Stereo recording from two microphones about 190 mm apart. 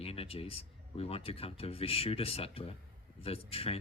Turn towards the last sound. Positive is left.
turn(degrees=30)  # may be behind; listen again after turning